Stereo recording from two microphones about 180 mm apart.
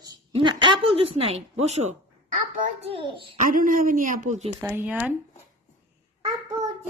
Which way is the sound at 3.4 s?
50° right (ahead or behind).